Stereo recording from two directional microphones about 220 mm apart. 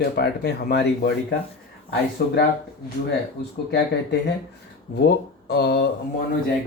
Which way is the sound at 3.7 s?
50° left (ahead or behind).